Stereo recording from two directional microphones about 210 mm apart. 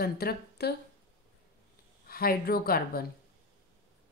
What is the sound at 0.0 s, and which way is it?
Speech, 50° left (ahead or behind).